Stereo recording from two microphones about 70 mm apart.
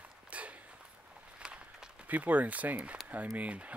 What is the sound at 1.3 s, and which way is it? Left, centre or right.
Run, centre.